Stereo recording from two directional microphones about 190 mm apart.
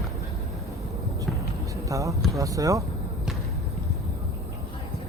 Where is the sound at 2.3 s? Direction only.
15° right (ahead or behind).